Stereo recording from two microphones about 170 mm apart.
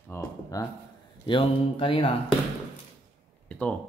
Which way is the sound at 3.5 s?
5° left (ahead or behind).